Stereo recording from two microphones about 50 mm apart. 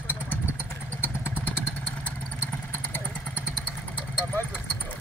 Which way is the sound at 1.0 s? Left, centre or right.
Left.